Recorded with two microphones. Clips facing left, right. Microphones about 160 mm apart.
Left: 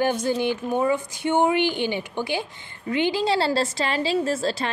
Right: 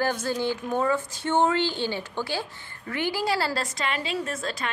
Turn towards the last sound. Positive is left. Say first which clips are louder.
# left 7 dB
turn(degrees=30)  # may be behind; listen again after turning